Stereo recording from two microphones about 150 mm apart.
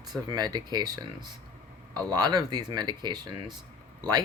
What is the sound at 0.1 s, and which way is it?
Speech, 30° right (ahead or behind).